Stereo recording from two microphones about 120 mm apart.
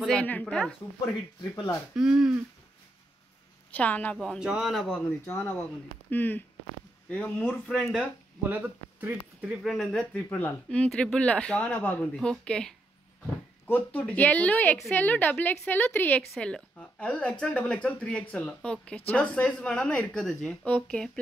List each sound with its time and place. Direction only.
0.1 s a woman's voice: 10° left (ahead or behind)
2.0 s speech: 5° right (ahead or behind)
3.7 s a woman's voice: 15° left (ahead or behind)
4.4 s speech: 5° right (ahead or behind)
6.0 s speech: 15° left (ahead or behind); by 9.5 s 15° right (ahead or behind)
9.6 s a woman's voice: centre (ahead or behind)